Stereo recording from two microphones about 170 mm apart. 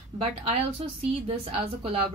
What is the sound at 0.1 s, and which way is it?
A woman's voice, 35° right (ahead or behind).